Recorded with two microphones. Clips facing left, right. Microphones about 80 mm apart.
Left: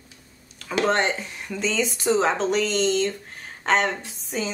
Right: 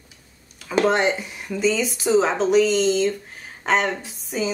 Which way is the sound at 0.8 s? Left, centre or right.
Centre.